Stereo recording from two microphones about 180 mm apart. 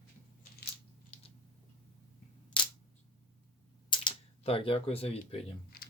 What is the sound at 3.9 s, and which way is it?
Camera, 30° left (ahead or behind).